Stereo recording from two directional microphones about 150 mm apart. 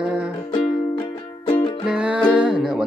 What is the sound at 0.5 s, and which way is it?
Music, 30° left (ahead or behind).